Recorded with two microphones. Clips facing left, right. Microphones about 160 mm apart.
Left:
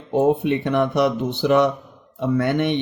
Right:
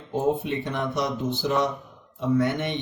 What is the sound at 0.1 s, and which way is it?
Speech, 65° left (ahead or behind).